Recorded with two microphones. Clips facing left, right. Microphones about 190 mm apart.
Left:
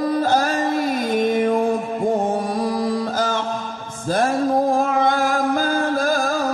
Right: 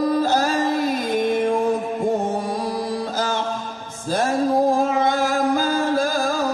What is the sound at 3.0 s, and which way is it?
Music, 50° left (ahead or behind).